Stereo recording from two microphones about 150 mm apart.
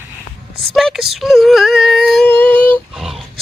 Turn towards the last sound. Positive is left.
turn(degrees=0)  # may be behind; listen again after turning